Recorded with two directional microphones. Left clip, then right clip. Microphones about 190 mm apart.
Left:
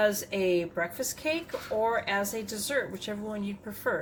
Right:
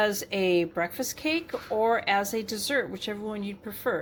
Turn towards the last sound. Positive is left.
turn(degrees=-35)  # may be behind; listen again after turning